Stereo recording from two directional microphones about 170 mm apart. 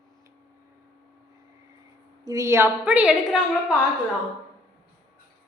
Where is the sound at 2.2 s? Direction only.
20° right (ahead or behind).